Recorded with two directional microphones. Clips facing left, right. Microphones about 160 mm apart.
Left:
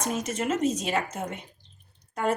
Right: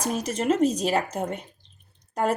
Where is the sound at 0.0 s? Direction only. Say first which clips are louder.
Right 2 dB; 35° right (ahead or behind).